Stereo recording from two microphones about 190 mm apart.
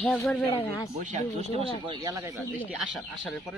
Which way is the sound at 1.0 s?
35° right (ahead or behind).